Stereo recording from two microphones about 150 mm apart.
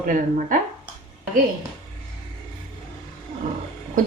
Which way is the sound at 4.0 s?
60° right (ahead or behind).